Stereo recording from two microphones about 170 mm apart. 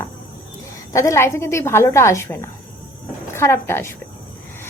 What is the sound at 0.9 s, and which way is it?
A woman's voice, 15° left (ahead or behind).